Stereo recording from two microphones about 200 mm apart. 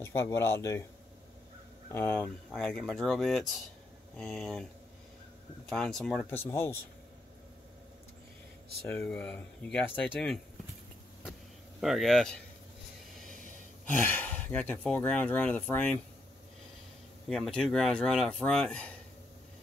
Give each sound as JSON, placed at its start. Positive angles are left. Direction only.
{"t": 0.0, "sound": "speech", "side_deg": 10}
{"t": 1.9, "sound": "speech", "side_deg": 10}
{"t": 5.7, "sound": "speech", "side_deg": 0}
{"t": 8.8, "sound": "speech", "side_deg": 10}
{"t": 11.8, "sound": "speech", "side_deg": 0}
{"t": 13.8, "sound": "speech", "side_deg": 10}
{"t": 17.3, "sound": "speech", "side_deg": 5}